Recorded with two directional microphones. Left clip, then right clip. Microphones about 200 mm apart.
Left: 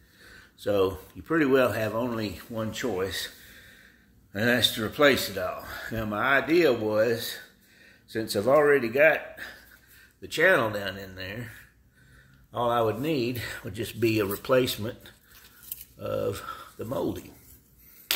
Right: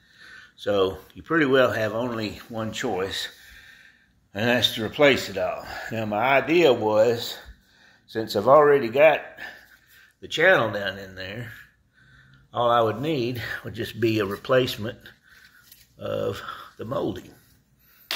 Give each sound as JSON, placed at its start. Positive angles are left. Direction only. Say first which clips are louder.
{"t": 0.2, "sound": "speech", "louder": "right 2 dB", "side_deg": 15}
{"t": 7.2, "sound": "a sound", "louder": "right 2 dB", "side_deg": 5}
{"t": 8.1, "sound": "speech", "louder": "right 5 dB", "side_deg": 15}